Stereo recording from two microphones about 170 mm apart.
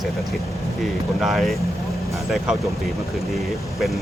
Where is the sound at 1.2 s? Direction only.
Centre (ahead or behind).